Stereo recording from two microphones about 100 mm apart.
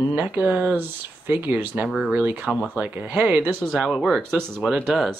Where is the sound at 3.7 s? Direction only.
5° right (ahead or behind).